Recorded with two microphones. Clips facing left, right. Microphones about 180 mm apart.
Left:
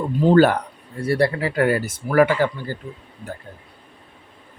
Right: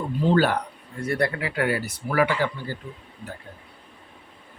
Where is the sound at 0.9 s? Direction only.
30° left (ahead or behind).